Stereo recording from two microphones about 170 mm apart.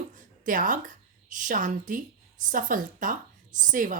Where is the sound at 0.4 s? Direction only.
50° right (ahead or behind).